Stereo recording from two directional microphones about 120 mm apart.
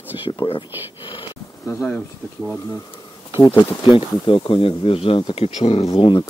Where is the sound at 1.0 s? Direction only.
45° left (ahead or behind).